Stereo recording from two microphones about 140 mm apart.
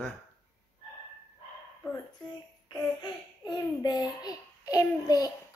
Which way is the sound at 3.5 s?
30° left (ahead or behind).